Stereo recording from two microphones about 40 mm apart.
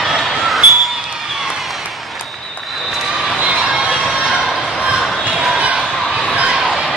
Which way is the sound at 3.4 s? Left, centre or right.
Right.